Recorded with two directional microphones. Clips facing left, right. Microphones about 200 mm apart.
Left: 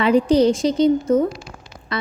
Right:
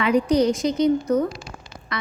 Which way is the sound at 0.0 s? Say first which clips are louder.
Left 4 dB; 30° left (ahead or behind).